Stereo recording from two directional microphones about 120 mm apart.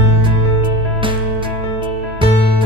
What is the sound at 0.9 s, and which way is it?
Music, 45° right (ahead or behind).